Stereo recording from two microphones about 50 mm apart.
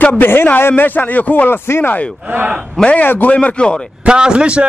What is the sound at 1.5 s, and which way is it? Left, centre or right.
Speech, left.